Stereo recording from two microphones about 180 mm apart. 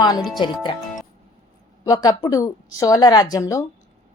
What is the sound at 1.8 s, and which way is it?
Speech, 20° left (ahead or behind).